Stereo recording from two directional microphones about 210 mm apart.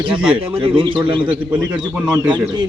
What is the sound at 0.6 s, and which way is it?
Speech, 25° right (ahead or behind).